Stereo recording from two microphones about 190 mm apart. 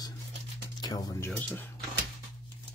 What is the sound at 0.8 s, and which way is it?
Speech, 20° left (ahead or behind).